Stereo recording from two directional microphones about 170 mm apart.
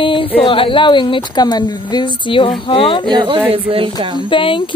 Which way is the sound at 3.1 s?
25° right (ahead or behind).